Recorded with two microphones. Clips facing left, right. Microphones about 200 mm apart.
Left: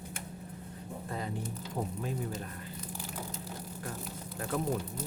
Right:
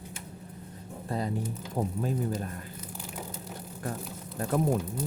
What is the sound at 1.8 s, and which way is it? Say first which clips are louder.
Speech: right 5 dB; 40° right (ahead or behind).